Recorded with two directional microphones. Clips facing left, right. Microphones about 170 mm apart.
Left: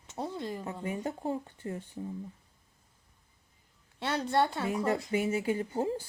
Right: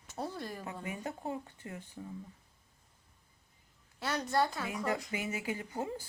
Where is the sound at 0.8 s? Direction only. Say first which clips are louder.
Left 6 dB; 30° left (ahead or behind).